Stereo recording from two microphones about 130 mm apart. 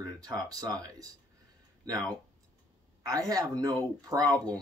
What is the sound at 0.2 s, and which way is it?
Speech, 30° right (ahead or behind).